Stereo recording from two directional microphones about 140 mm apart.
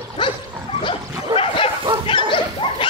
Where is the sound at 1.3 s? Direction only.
40° left (ahead or behind).